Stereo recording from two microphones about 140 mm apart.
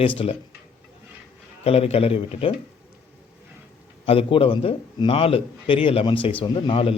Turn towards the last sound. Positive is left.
turn(degrees=40)  # may be behind; listen again after turning